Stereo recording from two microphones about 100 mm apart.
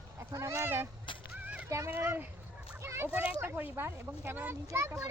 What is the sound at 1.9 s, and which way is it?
A child's voice, 20° right (ahead or behind).